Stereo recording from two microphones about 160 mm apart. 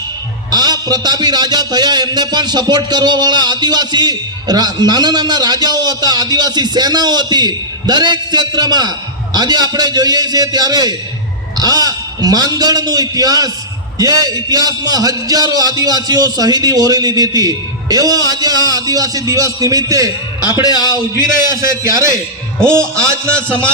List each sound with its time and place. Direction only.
0.5 s a man's voice: 25° right (ahead or behind)
20.7 s a man's voice: 25° left (ahead or behind)
21.5 s a man's voice: 15° right (ahead or behind)